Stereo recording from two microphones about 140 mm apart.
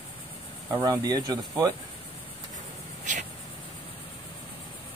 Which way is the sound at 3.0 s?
60° right (ahead or behind).